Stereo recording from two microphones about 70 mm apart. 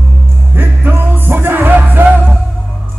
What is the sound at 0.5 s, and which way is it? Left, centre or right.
Music, right.